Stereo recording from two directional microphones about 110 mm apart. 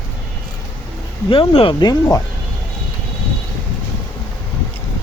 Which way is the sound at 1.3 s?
50° left (ahead or behind).